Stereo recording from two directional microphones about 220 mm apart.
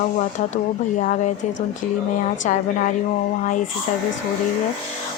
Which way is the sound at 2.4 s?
35° left (ahead or behind).